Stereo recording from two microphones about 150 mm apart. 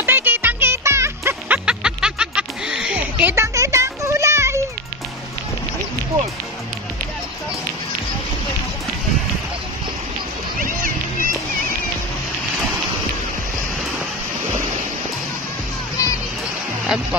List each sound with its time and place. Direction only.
0.0 s music: 15° right (ahead or behind)
1.7 s music: 5° right (ahead or behind)
10.6 s a sound: 65° right (ahead or behind)
16.0 s music: 25° left (ahead or behind)
16.8 s music: 5° right (ahead or behind)